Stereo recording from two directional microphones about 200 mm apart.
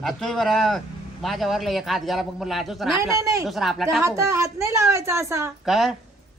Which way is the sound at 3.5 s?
Centre (ahead or behind).